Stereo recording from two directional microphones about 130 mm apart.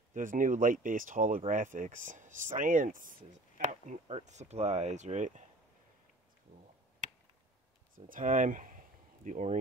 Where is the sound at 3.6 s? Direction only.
65° right (ahead or behind).